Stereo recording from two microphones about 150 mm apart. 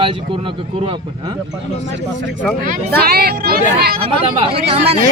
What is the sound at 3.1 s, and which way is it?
Speech, 90° right.